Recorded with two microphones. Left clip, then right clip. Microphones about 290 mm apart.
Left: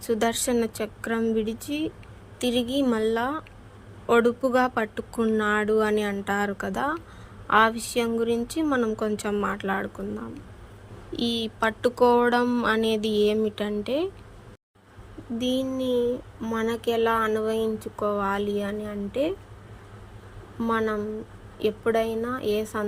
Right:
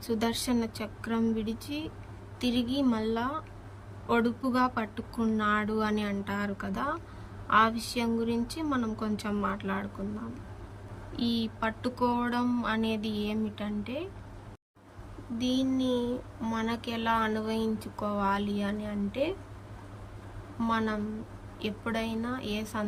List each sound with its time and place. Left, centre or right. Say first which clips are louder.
0.0 s speech: left 7 dB; centre
11.2 s speech: left 6 dB; centre
15.4 s speech: left 3 dB; centre
20.6 s speech: left 5 dB; centre